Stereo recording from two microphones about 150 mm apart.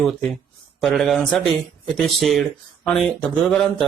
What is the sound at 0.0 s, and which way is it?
A man's voice, 5° left (ahead or behind).